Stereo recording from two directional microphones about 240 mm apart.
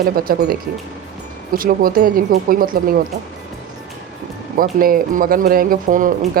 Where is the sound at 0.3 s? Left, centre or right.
Right.